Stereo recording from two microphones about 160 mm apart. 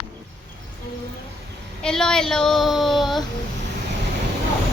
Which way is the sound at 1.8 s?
5° left (ahead or behind).